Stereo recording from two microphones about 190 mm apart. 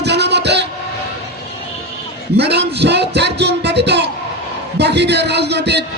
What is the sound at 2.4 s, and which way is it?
A man's voice, 60° right (ahead or behind).